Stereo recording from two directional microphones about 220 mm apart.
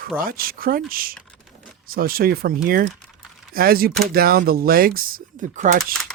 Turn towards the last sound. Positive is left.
turn(degrees=-35)  # may be behind; listen again after turning